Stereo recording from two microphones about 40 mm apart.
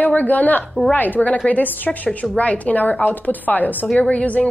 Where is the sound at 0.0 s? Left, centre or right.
Left.